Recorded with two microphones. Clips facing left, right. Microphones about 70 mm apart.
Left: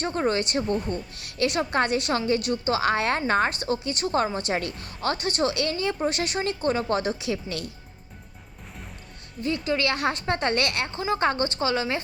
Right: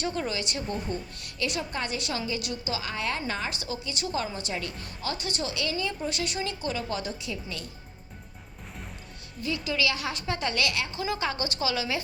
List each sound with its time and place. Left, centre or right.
0.0 s a woman's voice: left
0.6 s speech: centre
1.2 s a woman's voice: left
9.6 s a woman's voice: left